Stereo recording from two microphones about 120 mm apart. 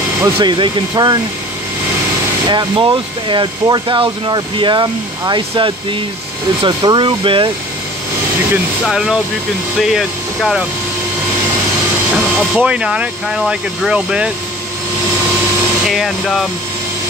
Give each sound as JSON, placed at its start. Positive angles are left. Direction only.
{"t": 0.4, "sound": "speech", "side_deg": -40}
{"t": 2.5, "sound": "speech", "side_deg": -40}
{"t": 8.8, "sound": "speech", "side_deg": -5}
{"t": 12.4, "sound": "speech", "side_deg": -10}
{"t": 15.9, "sound": "speech", "side_deg": 0}